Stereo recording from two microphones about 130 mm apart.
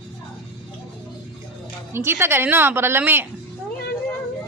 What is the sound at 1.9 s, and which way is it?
A woman's voice, 20° right (ahead or behind).